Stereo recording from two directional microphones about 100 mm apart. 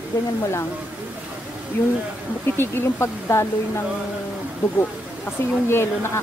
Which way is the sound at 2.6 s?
25° left (ahead or behind).